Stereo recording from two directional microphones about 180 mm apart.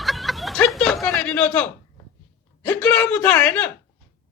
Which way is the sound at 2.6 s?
5° left (ahead or behind).